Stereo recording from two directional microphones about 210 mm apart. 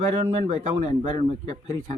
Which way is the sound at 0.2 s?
25° right (ahead or behind).